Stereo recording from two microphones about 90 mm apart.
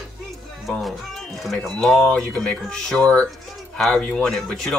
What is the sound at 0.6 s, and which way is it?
Speech, centre (ahead or behind).